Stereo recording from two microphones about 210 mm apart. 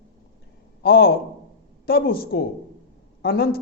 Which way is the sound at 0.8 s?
45° left (ahead or behind).